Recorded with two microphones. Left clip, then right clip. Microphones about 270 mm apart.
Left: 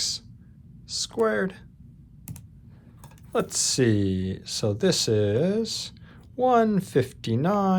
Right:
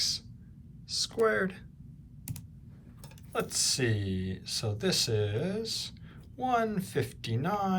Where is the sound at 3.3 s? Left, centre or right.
Centre.